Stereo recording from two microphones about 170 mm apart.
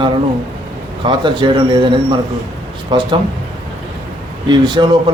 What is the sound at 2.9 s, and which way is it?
Speech, 25° right (ahead or behind).